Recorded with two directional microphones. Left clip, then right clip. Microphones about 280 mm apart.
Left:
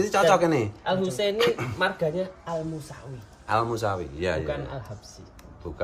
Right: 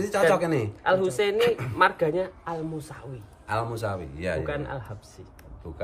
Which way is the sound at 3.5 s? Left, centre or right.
Centre.